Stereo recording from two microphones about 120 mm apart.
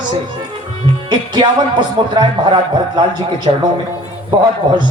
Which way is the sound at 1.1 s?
40° right (ahead or behind).